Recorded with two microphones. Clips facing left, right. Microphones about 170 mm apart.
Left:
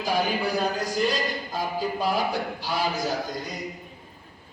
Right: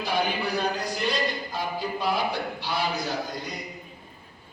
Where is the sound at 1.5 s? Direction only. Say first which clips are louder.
Left 2 dB; 40° left (ahead or behind).